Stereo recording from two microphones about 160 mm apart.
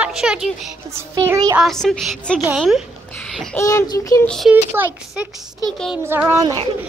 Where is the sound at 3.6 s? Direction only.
20° left (ahead or behind).